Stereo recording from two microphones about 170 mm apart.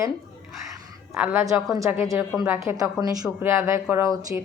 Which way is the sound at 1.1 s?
5° right (ahead or behind).